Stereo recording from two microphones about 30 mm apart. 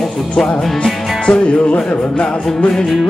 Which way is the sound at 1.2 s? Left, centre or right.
Left.